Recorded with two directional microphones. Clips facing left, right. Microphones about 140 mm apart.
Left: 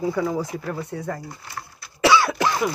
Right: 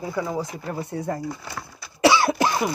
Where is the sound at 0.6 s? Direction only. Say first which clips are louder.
Right 1 dB; 30° right (ahead or behind).